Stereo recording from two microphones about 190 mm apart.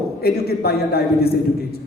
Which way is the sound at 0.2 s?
55° left (ahead or behind).